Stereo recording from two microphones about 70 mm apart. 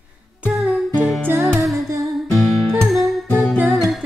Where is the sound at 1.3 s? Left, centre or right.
Right.